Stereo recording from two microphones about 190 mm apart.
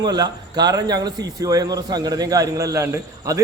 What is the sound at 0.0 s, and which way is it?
A man's voice, 20° right (ahead or behind).